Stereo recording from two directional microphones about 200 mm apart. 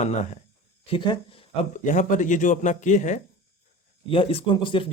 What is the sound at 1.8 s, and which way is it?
Speech, 40° left (ahead or behind).